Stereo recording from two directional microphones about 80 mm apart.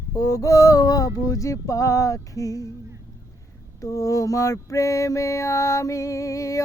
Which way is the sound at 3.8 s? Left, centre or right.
Left.